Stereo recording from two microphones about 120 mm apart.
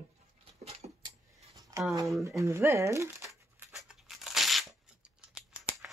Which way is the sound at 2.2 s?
25° right (ahead or behind).